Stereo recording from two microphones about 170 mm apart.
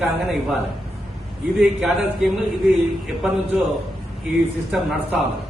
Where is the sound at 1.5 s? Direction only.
Centre (ahead or behind).